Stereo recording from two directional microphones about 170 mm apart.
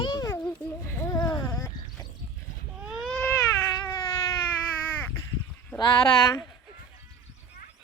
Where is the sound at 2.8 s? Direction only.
Centre (ahead or behind).